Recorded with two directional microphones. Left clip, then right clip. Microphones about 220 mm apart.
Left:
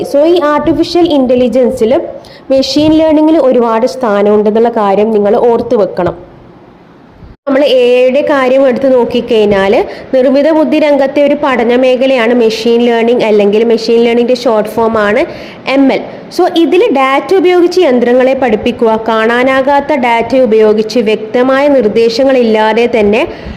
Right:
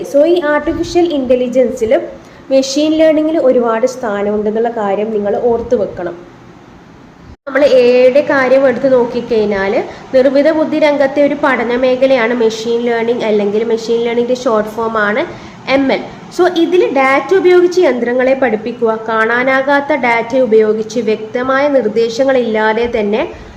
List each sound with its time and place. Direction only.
0.2 s a woman's voice: 30° left (ahead or behind)
7.5 s a woman's voice: 35° left (ahead or behind)